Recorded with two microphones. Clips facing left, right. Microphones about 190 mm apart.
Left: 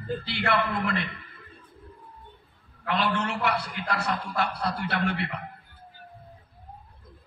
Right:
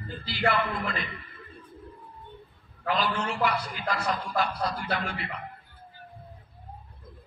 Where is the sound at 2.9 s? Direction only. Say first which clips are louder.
Left 1 dB; 65° left (ahead or behind).